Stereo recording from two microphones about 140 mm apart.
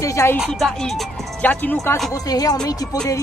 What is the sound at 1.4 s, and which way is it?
Speech, 10° left (ahead or behind).